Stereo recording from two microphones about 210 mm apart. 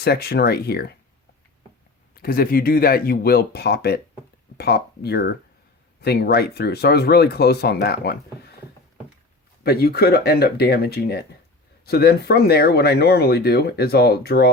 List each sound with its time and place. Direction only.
0.0 s speech: 50° left (ahead or behind)
2.1 s speech: 45° left (ahead or behind)
9.6 s speech: 50° left (ahead or behind)